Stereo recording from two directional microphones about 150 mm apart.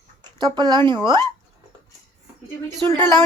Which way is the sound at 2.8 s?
30° right (ahead or behind).